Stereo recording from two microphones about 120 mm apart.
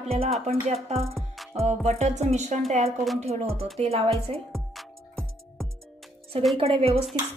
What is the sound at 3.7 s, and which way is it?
Speech, 55° right (ahead or behind).